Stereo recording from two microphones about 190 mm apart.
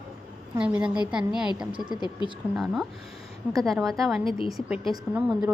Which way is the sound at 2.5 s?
Centre (ahead or behind).